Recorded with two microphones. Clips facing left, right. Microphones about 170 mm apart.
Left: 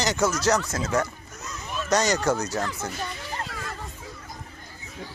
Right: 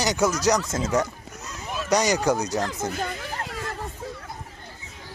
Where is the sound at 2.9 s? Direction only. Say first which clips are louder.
Right 4 dB; 55° right (ahead or behind).